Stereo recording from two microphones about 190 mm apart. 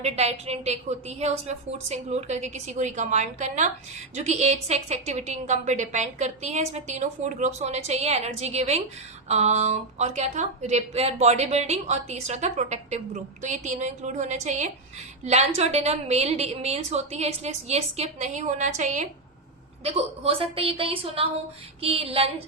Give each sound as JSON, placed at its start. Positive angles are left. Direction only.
{"t": 0.0, "sound": "a woman's voice", "side_deg": -35}
{"t": 19.8, "sound": "a woman's voice", "side_deg": -30}